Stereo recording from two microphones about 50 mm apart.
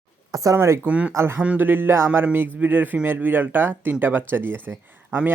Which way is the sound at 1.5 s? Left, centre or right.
Right.